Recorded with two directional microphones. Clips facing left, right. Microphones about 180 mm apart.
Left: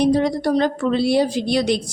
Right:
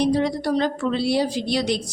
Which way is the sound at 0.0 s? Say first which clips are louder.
Left 3 dB; 50° left (ahead or behind).